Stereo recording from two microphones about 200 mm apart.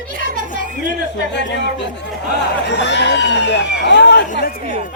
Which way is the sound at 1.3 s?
60° left (ahead or behind).